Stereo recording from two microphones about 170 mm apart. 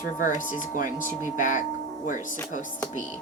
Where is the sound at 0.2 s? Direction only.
50° left (ahead or behind).